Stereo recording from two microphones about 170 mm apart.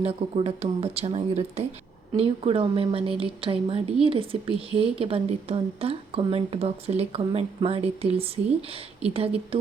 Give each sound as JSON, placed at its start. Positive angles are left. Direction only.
{"t": 0.0, "sound": "a woman's voice", "side_deg": -35}